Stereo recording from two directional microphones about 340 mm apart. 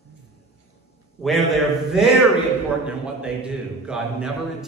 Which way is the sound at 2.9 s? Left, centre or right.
Centre.